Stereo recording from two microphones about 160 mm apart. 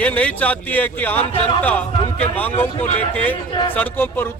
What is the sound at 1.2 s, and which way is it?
Speech, 35° left (ahead or behind).